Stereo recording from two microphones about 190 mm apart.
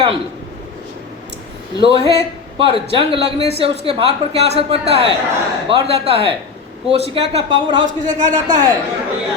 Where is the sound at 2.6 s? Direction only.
30° right (ahead or behind).